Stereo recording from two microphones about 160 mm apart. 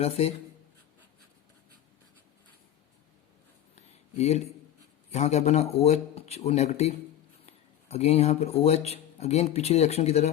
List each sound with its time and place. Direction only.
0.0 s speech: 40° left (ahead or behind)
3.8 s a sound: 40° left (ahead or behind)
5.1 s speech: 45° left (ahead or behind)